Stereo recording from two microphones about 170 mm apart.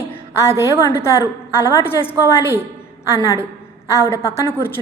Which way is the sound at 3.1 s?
15° left (ahead or behind).